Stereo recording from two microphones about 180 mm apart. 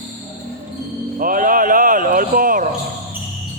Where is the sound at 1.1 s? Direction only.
50° right (ahead or behind).